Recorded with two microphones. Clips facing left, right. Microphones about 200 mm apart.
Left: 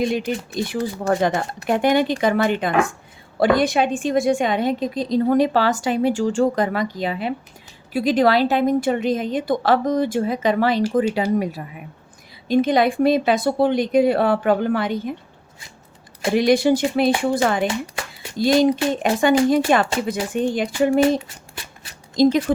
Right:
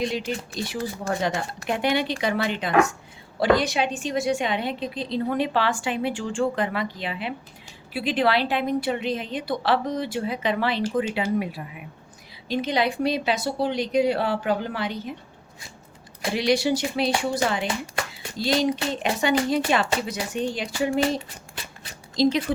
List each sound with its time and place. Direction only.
0.0 s a woman's voice: 55° left (ahead or behind)
12.5 s a woman's voice: 50° left (ahead or behind)
16.3 s a woman's voice: 50° left (ahead or behind)